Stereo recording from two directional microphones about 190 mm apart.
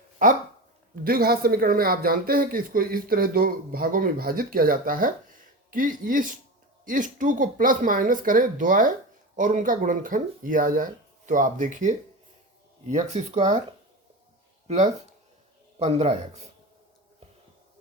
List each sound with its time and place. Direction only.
0.2 s speech: 45° right (ahead or behind)
15.8 s speech: 35° right (ahead or behind)